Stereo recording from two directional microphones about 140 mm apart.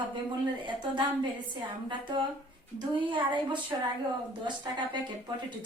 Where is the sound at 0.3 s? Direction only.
35° right (ahead or behind).